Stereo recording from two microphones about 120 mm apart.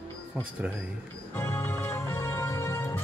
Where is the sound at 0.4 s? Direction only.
10° right (ahead or behind).